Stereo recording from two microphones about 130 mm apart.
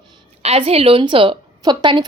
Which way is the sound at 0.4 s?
50° right (ahead or behind).